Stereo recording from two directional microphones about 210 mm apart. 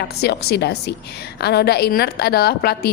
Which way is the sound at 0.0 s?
50° left (ahead or behind).